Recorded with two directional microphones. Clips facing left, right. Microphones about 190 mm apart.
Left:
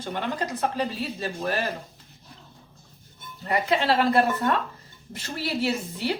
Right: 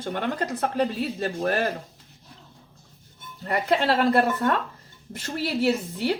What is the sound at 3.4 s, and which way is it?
Speech, 50° right (ahead or behind).